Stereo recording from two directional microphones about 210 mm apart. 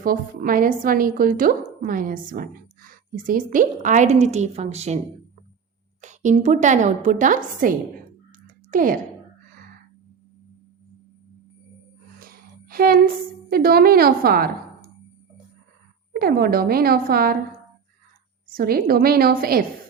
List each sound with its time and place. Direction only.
0.0 s a woman's voice: 40° right (ahead or behind)
6.0 s a woman's voice: 35° right (ahead or behind)
12.2 s a sound: 45° right (ahead or behind)
13.5 s a woman's voice: 45° right (ahead or behind)
16.1 s a woman's voice: 45° right (ahead or behind)
18.4 s a woman's voice: 45° right (ahead or behind)